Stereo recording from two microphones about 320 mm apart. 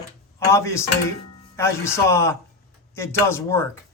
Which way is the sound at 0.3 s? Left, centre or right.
Centre.